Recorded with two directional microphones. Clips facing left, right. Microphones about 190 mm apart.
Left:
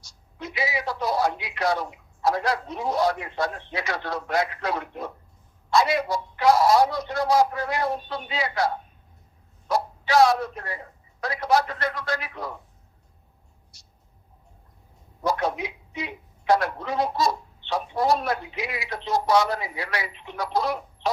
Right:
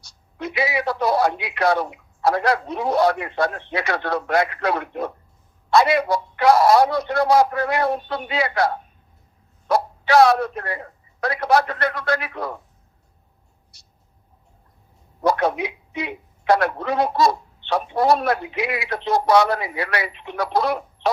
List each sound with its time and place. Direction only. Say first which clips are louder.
0.0 s speech: right 7 dB; 65° right (ahead or behind)
13.7 s a sound: even; 65° right (ahead or behind)
15.2 s speech: right 5 dB; 65° right (ahead or behind)